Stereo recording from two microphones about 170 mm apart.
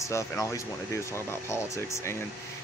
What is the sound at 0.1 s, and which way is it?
Speech, 20° left (ahead or behind).